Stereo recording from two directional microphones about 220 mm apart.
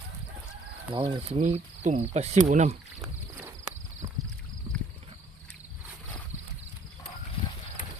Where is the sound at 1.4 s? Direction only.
35° right (ahead or behind).